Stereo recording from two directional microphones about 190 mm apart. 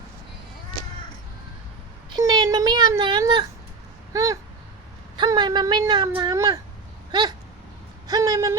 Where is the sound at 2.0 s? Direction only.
20° right (ahead or behind).